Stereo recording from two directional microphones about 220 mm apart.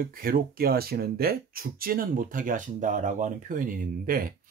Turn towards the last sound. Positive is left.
turn(degrees=-40)  # may be behind; listen again after turning